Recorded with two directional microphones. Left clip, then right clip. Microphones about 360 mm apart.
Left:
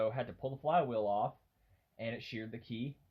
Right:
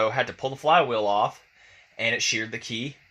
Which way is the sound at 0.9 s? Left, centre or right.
Right.